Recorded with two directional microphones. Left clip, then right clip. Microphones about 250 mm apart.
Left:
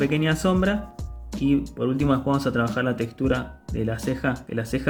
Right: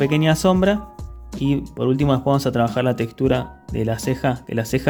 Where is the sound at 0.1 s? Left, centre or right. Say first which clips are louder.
Right 5 dB; right.